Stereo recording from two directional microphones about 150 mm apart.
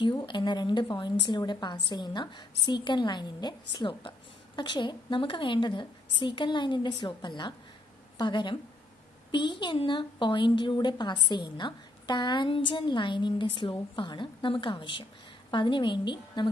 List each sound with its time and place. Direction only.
0.0 s a woman's voice: 30° left (ahead or behind)